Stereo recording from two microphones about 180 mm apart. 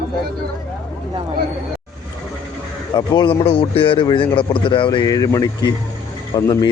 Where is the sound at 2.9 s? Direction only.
25° left (ahead or behind).